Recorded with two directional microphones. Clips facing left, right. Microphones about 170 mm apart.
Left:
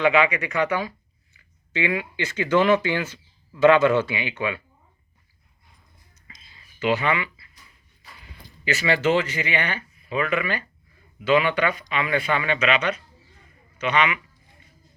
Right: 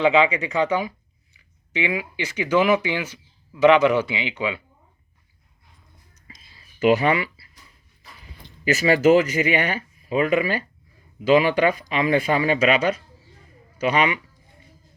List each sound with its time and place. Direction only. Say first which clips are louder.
0.0 s speech: right 2 dB; 20° right (ahead or behind)
6.7 s speech: right 5 dB; 40° right (ahead or behind)
8.6 s speech: right 5 dB; 40° right (ahead or behind)